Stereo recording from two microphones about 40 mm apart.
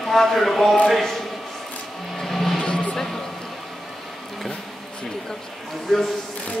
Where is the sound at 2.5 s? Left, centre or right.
Centre.